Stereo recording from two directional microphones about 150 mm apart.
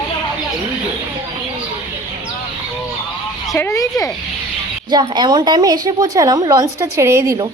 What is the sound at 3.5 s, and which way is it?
Speech, 20° left (ahead or behind).